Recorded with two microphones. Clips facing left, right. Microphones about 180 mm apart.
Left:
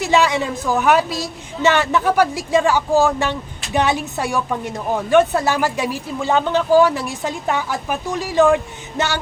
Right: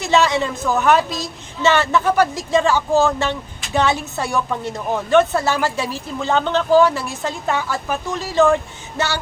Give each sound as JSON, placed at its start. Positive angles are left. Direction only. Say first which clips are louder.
{"t": 0.0, "sound": "a woman's voice", "louder": "even", "side_deg": 10}